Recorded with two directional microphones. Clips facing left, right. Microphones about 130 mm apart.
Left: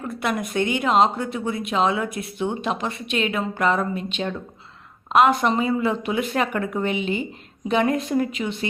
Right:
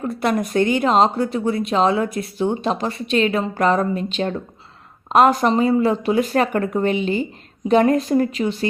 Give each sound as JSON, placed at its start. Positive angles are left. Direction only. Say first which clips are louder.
{"t": 0.2, "sound": "speech", "louder": "right 5 dB", "side_deg": -35}